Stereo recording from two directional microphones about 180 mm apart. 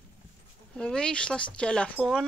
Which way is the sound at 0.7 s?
5° left (ahead or behind).